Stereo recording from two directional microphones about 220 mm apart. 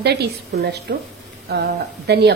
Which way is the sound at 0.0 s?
50° right (ahead or behind).